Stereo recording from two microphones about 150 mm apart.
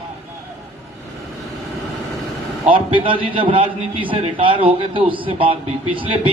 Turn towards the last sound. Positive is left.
turn(degrees=-35)  # may be behind; listen again after turning